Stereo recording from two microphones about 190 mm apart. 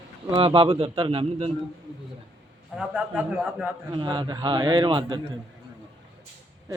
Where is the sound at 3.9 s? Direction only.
25° right (ahead or behind).